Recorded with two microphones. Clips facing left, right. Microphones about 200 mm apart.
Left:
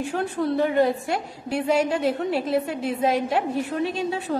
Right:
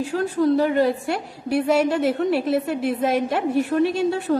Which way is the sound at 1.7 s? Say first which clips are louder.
Right 1 dB; 70° right (ahead or behind).